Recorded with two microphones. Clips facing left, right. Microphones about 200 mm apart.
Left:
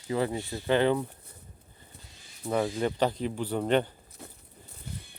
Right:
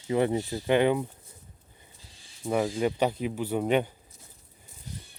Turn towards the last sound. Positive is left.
turn(degrees=65)  # may be behind; listen again after turning